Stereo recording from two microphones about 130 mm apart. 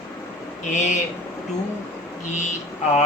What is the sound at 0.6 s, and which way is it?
Speech, 70° left (ahead or behind).